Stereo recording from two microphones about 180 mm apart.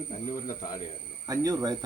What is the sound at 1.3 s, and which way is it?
Speech, 20° right (ahead or behind).